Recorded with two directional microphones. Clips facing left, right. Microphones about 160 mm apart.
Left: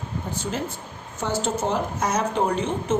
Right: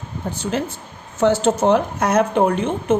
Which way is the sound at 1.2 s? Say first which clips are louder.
Right 9 dB; 75° right (ahead or behind).